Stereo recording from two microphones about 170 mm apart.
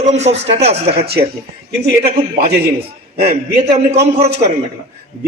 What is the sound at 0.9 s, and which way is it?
Speech, 70° right (ahead or behind).